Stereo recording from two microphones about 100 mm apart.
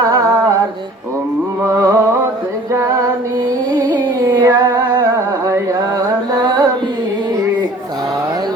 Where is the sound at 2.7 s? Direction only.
30° right (ahead or behind).